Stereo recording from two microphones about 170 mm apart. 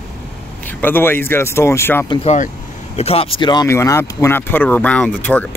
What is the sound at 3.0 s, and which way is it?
Speech, 35° left (ahead or behind).